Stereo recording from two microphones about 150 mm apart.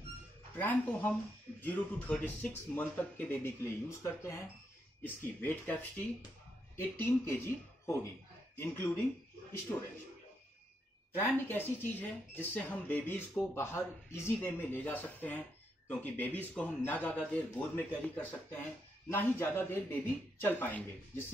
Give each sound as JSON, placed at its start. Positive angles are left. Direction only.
{"t": 0.6, "sound": "speech", "side_deg": 10}
{"t": 11.1, "sound": "speech", "side_deg": 15}